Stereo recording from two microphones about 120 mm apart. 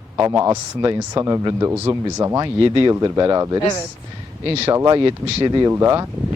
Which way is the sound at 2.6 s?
40° right (ahead or behind).